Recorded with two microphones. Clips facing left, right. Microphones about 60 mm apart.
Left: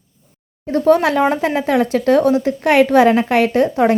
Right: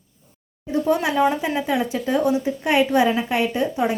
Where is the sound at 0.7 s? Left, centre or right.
Left.